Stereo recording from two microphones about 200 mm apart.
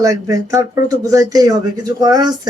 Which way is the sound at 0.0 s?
15° right (ahead or behind).